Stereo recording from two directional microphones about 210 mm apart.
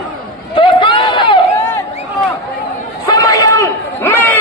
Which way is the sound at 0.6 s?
25° left (ahead or behind).